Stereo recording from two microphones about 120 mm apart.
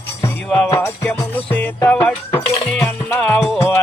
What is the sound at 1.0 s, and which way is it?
Music, 15° left (ahead or behind).